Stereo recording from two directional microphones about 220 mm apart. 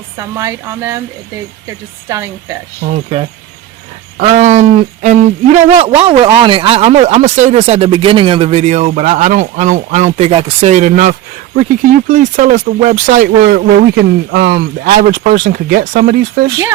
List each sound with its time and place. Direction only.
0.2 s speech: 15° right (ahead or behind)
2.0 s speech: 15° right (ahead or behind)
2.9 s speech: 30° right (ahead or behind)